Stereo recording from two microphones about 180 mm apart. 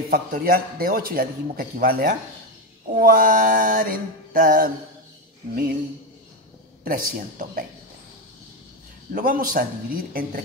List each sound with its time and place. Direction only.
0.1 s a man's voice: 55° right (ahead or behind)
6.8 s a man's voice: 50° right (ahead or behind)
9.1 s a man's voice: 50° right (ahead or behind)